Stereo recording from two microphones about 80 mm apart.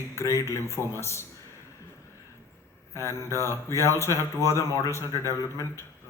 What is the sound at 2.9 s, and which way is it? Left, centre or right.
Speech, left.